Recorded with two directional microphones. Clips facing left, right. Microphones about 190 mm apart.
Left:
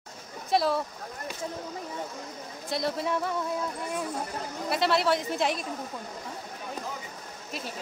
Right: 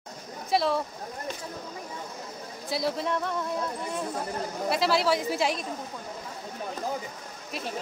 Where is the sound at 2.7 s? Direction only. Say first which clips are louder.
Right 1 dB; centre (ahead or behind).